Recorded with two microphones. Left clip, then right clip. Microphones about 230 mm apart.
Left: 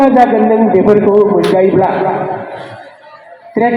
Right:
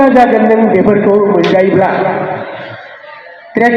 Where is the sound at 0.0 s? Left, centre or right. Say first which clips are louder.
Right 1 dB; right.